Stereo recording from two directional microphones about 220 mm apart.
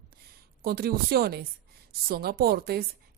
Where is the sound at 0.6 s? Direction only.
45° right (ahead or behind).